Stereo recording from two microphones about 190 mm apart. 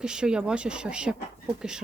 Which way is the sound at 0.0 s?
5° right (ahead or behind).